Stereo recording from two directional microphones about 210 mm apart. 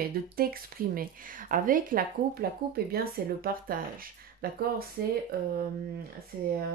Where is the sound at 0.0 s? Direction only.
45° right (ahead or behind).